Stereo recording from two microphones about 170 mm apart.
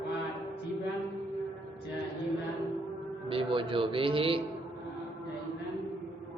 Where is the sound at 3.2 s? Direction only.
30° right (ahead or behind).